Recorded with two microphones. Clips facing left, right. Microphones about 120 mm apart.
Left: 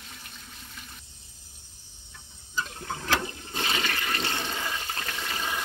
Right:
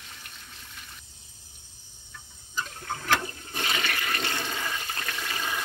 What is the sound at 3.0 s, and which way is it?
Toilet flush, 25° left (ahead or behind).